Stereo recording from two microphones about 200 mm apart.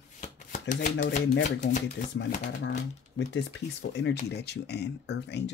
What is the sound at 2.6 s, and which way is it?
Speech, 65° left (ahead or behind).